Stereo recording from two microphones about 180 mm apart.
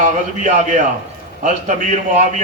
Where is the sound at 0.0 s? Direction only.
45° right (ahead or behind).